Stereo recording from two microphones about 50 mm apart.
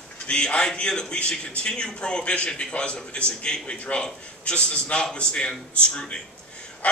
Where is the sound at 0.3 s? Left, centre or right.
Left.